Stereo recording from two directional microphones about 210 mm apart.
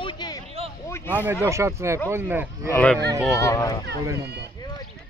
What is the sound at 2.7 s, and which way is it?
Speech, 5° left (ahead or behind).